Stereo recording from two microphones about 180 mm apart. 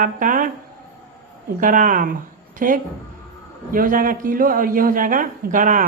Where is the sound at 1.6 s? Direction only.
50° right (ahead or behind).